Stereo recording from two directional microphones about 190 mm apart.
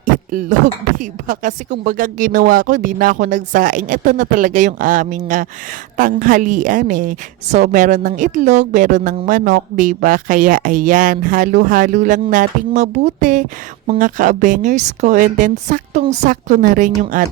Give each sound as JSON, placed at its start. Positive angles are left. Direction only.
{"t": 0.0, "sound": "a woman's voice", "side_deg": -45}